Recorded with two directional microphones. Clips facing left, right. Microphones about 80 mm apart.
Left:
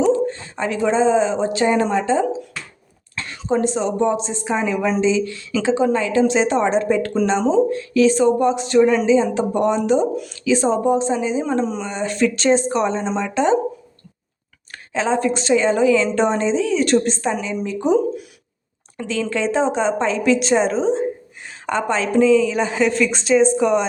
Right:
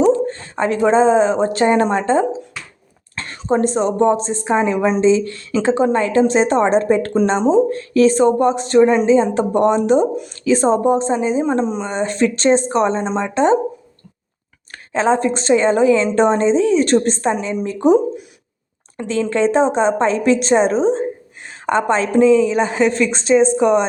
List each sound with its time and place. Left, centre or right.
0.3 s a woman's voice: right
8.8 s a woman's voice: right
9.0 s a woman's voice: right
11.6 s a woman's voice: right
11.9 s a woman's voice: right
13.3 s a woman's voice: right
14.7 s a woman's voice: right
19.0 s a woman's voice: right